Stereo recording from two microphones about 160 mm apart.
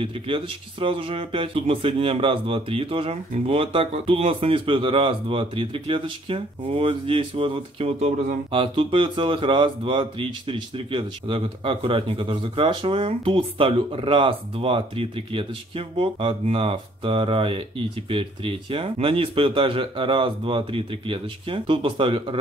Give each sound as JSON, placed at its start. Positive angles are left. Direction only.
{"t": 0.0, "sound": "speech", "side_deg": -35}